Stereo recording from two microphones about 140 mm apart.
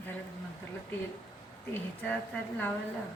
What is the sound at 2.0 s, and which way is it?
Speech, 10° left (ahead or behind).